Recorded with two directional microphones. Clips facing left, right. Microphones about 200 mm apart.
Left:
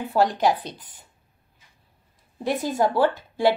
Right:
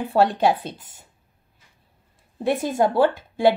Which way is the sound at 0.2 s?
30° right (ahead or behind).